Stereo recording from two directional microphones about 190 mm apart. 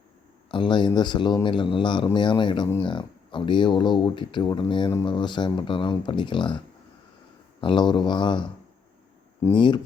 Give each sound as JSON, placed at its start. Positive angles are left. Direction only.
{"t": 0.5, "sound": "speech", "side_deg": 25}
{"t": 7.6, "sound": "speech", "side_deg": 25}
{"t": 9.6, "sound": "speech", "side_deg": 25}